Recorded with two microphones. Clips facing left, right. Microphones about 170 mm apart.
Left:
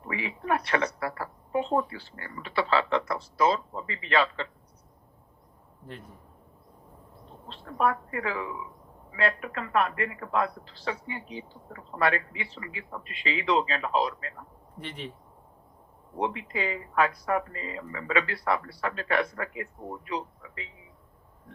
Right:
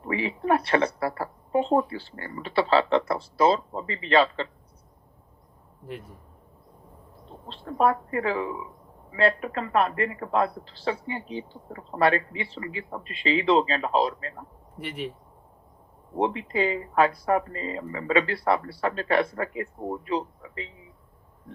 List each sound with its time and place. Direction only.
0.1 s speech: 30° right (ahead or behind)
7.4 s speech: 30° right (ahead or behind)
14.8 s speech: 5° right (ahead or behind)
16.1 s speech: 30° right (ahead or behind)